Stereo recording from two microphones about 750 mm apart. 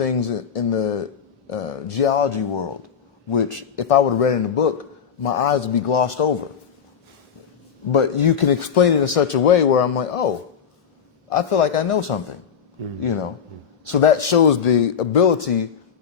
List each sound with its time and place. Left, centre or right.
0.0 s speech: left
7.9 s speech: left